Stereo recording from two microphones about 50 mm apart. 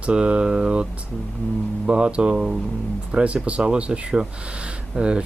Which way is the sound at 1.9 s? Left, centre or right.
Right.